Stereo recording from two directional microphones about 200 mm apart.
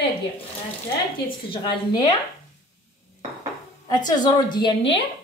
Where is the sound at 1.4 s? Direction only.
20° left (ahead or behind).